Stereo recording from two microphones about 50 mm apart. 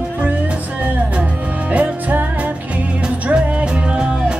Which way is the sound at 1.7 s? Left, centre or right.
Right.